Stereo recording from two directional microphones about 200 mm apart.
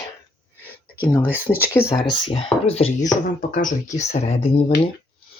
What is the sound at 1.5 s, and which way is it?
Speech, 20° left (ahead or behind).